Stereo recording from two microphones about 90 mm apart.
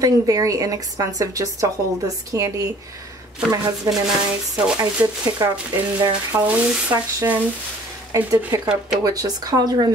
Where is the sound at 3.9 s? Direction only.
40° right (ahead or behind).